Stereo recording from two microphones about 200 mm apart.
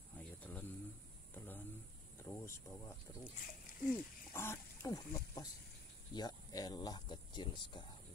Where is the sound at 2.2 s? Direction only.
15° left (ahead or behind).